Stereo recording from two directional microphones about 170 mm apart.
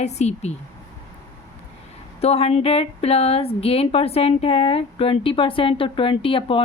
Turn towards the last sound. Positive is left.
turn(degrees=30)  # may be behind; listen again after turning